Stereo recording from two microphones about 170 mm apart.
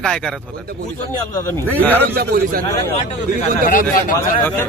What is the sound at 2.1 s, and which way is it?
Speech, 60° right (ahead or behind).